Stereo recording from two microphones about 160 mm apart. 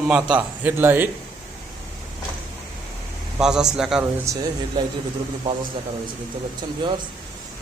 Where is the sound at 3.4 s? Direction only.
5° right (ahead or behind).